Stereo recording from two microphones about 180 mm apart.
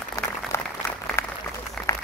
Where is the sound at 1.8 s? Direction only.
5° left (ahead or behind).